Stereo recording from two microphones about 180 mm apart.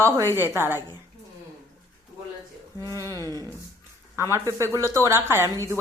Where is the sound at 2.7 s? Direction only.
15° left (ahead or behind).